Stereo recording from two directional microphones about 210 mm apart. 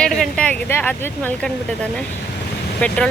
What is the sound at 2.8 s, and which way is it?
Speech, 5° left (ahead or behind).